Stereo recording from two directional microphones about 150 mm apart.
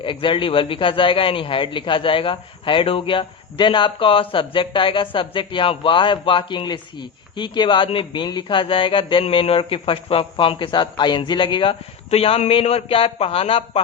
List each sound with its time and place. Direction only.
0.0 s a man's voice: 35° left (ahead or behind)